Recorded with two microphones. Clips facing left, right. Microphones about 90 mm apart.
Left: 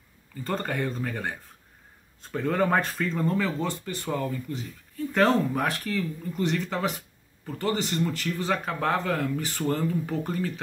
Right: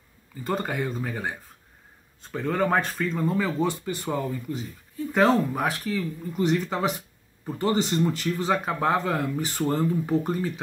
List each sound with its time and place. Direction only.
0.3 s speech: 10° right (ahead or behind)